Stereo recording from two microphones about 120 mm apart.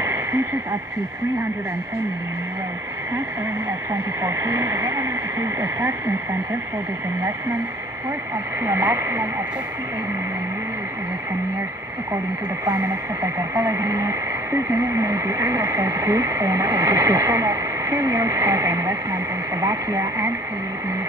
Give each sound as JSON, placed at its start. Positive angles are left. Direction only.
{"t": 0.0, "sound": "a sound", "side_deg": -20}
{"t": 4.2, "sound": "speech", "side_deg": -20}
{"t": 8.6, "sound": "speech", "side_deg": -25}
{"t": 12.6, "sound": "speech", "side_deg": -30}